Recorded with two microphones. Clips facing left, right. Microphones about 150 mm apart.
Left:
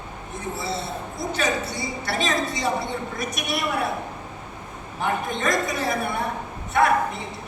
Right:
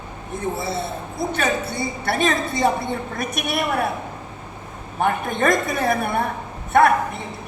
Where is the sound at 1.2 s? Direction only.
55° right (ahead or behind).